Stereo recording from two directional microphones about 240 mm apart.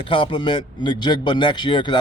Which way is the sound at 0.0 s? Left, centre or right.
Left.